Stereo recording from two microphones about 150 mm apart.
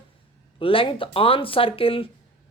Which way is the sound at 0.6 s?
35° left (ahead or behind).